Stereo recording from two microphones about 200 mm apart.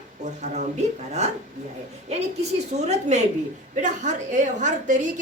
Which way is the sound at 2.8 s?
35° right (ahead or behind).